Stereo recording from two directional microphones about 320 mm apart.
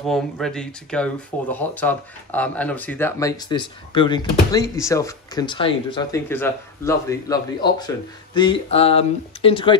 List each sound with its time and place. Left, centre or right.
0.0 s speech: centre